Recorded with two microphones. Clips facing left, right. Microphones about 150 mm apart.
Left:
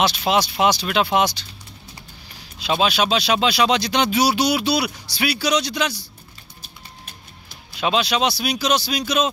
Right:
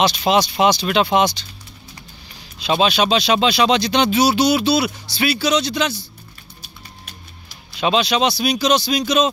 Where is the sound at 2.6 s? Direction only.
5° left (ahead or behind).